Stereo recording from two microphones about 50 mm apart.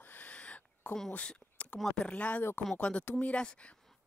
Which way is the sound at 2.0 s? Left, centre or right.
Left.